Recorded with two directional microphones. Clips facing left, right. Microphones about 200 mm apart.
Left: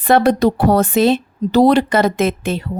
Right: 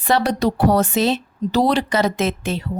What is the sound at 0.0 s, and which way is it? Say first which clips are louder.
A woman's voice: left 6 dB; 55° left (ahead or behind).